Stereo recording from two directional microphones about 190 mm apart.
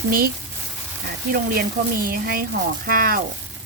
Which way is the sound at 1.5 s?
50° right (ahead or behind).